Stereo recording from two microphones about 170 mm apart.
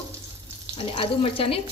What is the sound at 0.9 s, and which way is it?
Speech, 35° left (ahead or behind).